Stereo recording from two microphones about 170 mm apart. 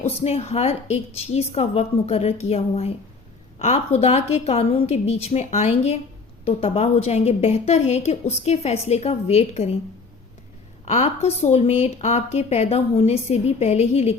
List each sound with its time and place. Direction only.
0.0 s speech: 35° left (ahead or behind)
10.8 s speech: 40° left (ahead or behind)